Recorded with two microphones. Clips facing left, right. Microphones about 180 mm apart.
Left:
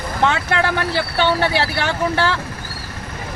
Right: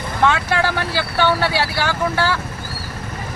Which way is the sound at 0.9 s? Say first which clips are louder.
Right 1 dB; 20° left (ahead or behind).